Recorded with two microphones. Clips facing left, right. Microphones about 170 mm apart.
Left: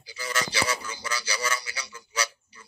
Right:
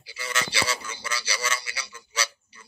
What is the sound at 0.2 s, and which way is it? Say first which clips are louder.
A man's voice: left 1 dB; 25° right (ahead or behind).